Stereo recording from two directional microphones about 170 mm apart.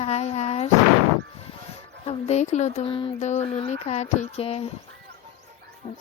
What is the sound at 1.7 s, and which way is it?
A woman's voice, 35° left (ahead or behind).